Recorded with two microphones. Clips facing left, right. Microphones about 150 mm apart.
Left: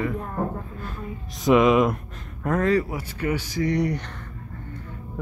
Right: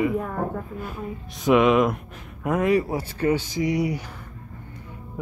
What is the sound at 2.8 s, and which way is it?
Speech, 30° right (ahead or behind).